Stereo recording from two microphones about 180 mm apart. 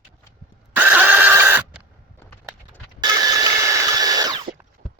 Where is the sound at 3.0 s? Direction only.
20° right (ahead or behind).